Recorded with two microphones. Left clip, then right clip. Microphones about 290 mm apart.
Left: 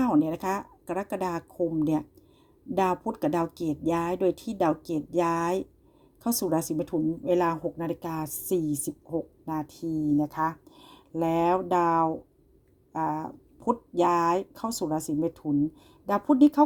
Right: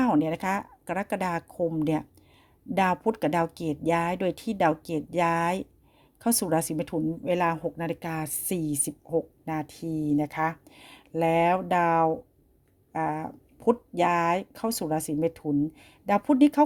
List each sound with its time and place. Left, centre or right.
0.0 s speech: right